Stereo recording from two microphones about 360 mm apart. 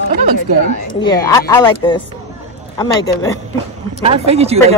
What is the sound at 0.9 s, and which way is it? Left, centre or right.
A woman's voice, centre.